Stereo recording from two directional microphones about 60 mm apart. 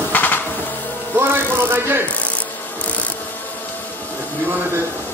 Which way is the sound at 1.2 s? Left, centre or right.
Right.